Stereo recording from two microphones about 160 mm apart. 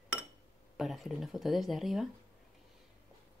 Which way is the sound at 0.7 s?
Centre (ahead or behind).